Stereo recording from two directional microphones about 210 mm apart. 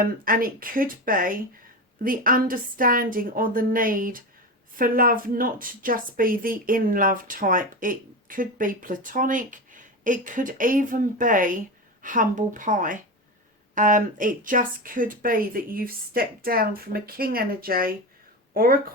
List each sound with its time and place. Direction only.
0.0 s a woman's voice: 40° right (ahead or behind)